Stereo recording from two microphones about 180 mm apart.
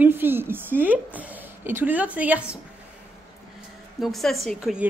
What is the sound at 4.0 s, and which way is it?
Speech, centre (ahead or behind).